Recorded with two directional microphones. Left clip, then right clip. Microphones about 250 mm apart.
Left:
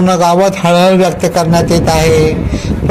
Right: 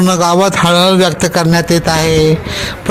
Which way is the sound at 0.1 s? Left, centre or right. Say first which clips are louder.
Left 2 dB; right.